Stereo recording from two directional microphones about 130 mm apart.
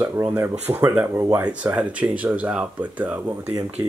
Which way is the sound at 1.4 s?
10° right (ahead or behind).